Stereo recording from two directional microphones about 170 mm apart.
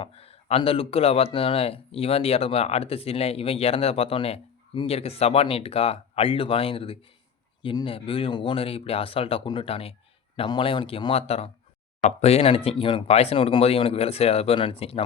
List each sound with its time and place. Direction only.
0.0 s speech: 35° left (ahead or behind)